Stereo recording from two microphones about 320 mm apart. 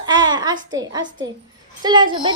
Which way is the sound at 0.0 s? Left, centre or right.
Centre.